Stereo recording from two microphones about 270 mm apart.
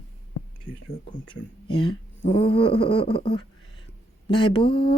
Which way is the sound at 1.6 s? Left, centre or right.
Centre.